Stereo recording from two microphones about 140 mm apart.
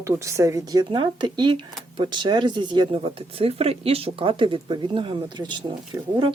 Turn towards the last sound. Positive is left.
turn(degrees=-35)  # may be behind; listen again after turning